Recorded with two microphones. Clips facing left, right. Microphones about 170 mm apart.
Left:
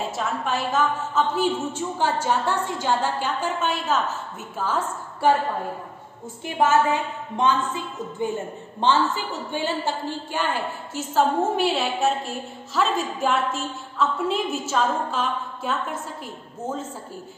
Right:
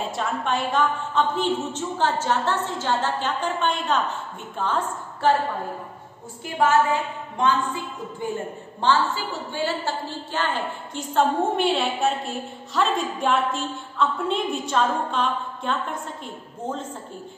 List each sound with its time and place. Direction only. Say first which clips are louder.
0.0 s a woman's voice: even; centre (ahead or behind)
6.4 s a woman's voice: even; 20° left (ahead or behind); by 16.0 s 5° left (ahead or behind)